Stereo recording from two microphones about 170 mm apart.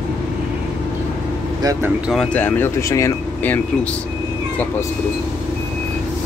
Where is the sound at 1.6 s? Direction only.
20° right (ahead or behind).